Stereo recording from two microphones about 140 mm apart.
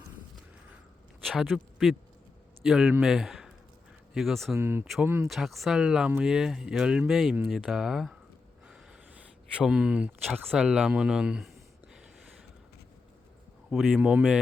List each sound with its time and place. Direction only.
1.2 s speech: 5° left (ahead or behind)
4.5 s speech: 15° right (ahead or behind)
5.3 s speech: centre (ahead or behind)
8.6 s a sound: 5° right (ahead or behind)
10.4 s speech: centre (ahead or behind)
13.7 s speech: centre (ahead or behind)